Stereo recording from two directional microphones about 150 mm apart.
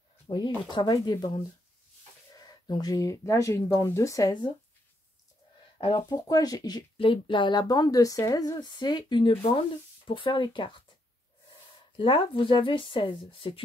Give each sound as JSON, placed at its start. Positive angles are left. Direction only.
{"t": 0.3, "sound": "speech", "side_deg": 30}
{"t": 5.8, "sound": "speech", "side_deg": 35}
{"t": 12.0, "sound": "speech", "side_deg": 35}